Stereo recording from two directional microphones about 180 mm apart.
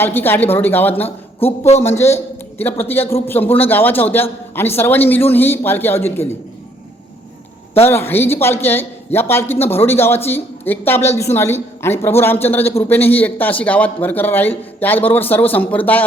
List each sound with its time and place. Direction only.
0.0 s speech: 10° left (ahead or behind)
1.4 s a man's voice: 35° left (ahead or behind)
2.0 s speech: 15° left (ahead or behind)
7.9 s speech: 10° left (ahead or behind)